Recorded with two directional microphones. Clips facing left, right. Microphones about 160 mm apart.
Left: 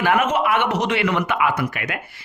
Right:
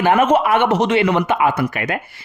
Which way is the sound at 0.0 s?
30° right (ahead or behind).